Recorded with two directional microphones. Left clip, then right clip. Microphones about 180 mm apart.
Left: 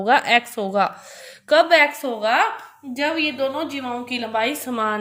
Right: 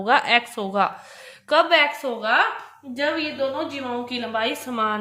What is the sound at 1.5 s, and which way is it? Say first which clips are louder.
A woman's voice: left 3 dB; 30° left (ahead or behind).